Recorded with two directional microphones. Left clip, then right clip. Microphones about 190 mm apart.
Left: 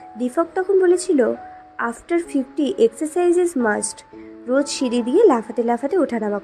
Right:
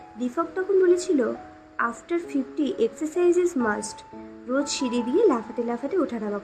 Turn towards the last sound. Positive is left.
turn(degrees=30)  # may be behind; listen again after turning